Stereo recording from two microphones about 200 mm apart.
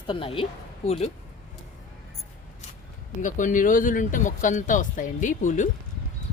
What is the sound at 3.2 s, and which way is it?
Speech, 40° left (ahead or behind).